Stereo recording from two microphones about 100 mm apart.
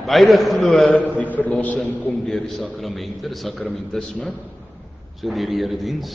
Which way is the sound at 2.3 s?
Centre (ahead or behind).